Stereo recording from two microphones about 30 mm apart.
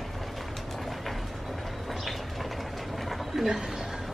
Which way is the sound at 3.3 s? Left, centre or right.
Centre.